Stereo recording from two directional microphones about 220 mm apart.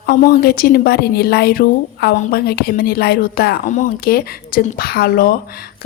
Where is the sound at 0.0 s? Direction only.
45° left (ahead or behind).